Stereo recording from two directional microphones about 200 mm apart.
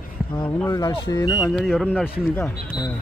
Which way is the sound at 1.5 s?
Centre (ahead or behind).